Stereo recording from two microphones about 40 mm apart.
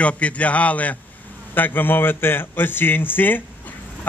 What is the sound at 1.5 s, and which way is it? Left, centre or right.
A man's voice, left.